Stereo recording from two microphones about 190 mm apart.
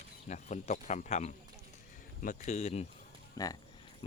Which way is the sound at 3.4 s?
20° left (ahead or behind).